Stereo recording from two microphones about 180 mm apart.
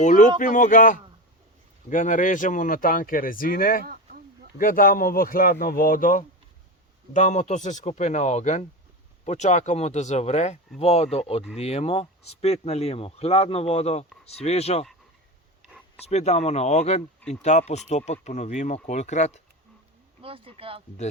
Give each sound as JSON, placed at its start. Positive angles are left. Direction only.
{"t": 0.0, "sound": "speech", "side_deg": 45}
{"t": 3.8, "sound": "a sound", "side_deg": -55}
{"t": 4.5, "sound": "speech", "side_deg": 50}
{"t": 16.0, "sound": "speech", "side_deg": 35}
{"t": 20.2, "sound": "speech", "side_deg": -30}